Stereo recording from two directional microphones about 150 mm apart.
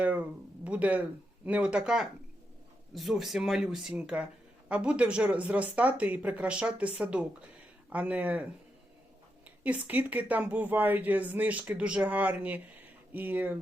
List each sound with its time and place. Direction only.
0.0 s speech: 10° right (ahead or behind)
9.6 s speech: 10° right (ahead or behind)